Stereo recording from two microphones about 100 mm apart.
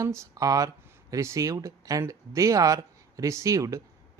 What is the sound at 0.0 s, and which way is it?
Speech, 30° right (ahead or behind).